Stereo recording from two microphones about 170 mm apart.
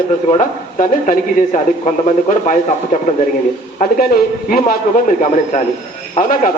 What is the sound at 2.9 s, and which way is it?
A man's voice, 55° left (ahead or behind).